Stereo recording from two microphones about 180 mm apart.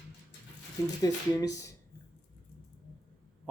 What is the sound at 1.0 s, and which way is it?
Speech, 20° left (ahead or behind).